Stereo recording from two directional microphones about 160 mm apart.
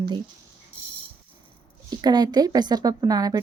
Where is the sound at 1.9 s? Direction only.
25° right (ahead or behind).